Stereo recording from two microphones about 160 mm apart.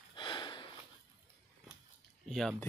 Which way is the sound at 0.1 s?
30° left (ahead or behind).